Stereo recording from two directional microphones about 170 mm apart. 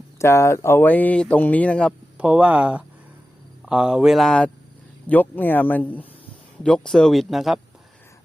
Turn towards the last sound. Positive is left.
turn(degrees=0)  # may be behind; listen again after turning